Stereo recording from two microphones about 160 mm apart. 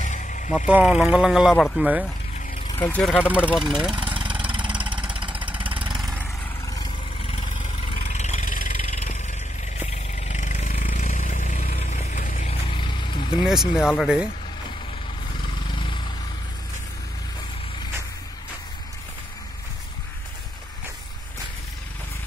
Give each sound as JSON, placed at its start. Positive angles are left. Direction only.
{"t": 0.0, "sound": "vehicle", "side_deg": 50}
{"t": 0.7, "sound": "speech", "side_deg": -5}
{"t": 2.3, "sound": "vehicle", "side_deg": 45}
{"t": 2.9, "sound": "speech", "side_deg": 0}
{"t": 4.3, "sound": "vehicle", "side_deg": -10}
{"t": 5.9, "sound": "vehicle", "side_deg": 0}
{"t": 6.6, "sound": "vehicle", "side_deg": 20}
{"t": 7.3, "sound": "vehicle", "side_deg": 50}
{"t": 12.6, "sound": "vehicle", "side_deg": 30}
{"t": 13.5, "sound": "speech", "side_deg": 0}
{"t": 15.7, "sound": "vehicle", "side_deg": 30}